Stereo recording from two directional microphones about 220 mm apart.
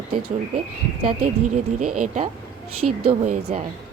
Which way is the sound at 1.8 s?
90° right.